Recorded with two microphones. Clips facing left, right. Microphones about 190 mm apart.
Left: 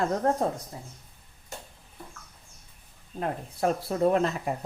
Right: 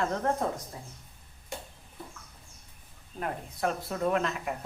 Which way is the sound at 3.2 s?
30° left (ahead or behind).